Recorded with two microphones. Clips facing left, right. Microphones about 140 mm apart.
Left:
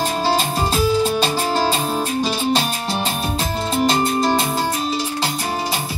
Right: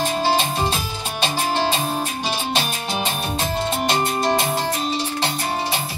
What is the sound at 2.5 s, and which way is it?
Music, 40° left (ahead or behind).